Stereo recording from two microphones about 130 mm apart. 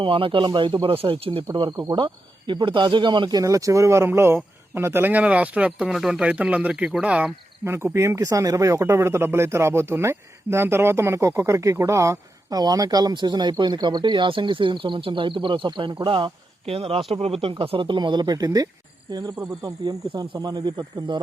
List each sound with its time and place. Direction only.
0.0 s speech: 40° right (ahead or behind)
1.7 s speech: 25° right (ahead or behind)
2.0 s speech: 40° right (ahead or behind)